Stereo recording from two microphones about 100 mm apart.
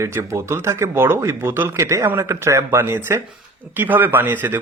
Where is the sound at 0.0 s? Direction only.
25° right (ahead or behind).